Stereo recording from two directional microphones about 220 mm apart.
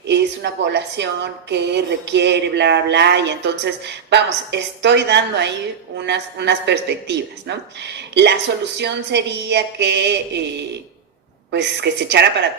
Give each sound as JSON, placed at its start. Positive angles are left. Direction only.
{"t": 0.1, "sound": "a woman's voice", "side_deg": -50}
{"t": 11.5, "sound": "a woman's voice", "side_deg": -50}